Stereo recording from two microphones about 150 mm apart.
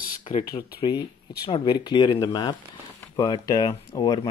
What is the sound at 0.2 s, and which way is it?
Speech, 40° left (ahead or behind).